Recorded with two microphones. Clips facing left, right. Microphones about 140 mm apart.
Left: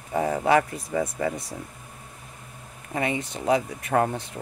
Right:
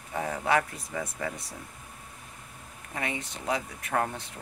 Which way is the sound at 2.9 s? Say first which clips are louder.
Left 7 dB; 15° left (ahead or behind).